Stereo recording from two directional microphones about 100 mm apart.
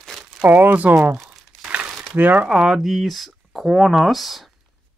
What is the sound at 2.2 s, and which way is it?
Speech, 15° right (ahead or behind).